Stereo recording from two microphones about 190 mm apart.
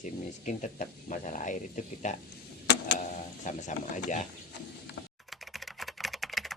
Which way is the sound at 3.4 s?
40° left (ahead or behind).